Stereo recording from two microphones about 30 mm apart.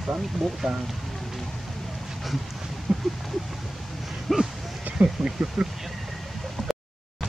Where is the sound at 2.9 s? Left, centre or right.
Centre.